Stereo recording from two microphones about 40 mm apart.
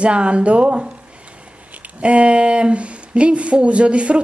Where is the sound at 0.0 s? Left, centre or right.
Right.